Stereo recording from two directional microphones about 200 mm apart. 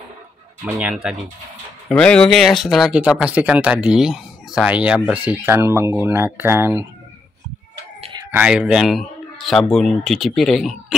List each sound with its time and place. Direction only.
0.7 s speech: 5° right (ahead or behind)
8.0 s a sound: 25° right (ahead or behind)
8.3 s speech: 5° right (ahead or behind)